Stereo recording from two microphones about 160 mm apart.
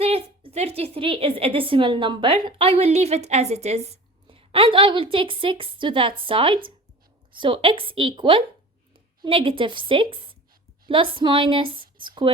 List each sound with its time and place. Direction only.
0.0 s a woman's voice: 40° right (ahead or behind)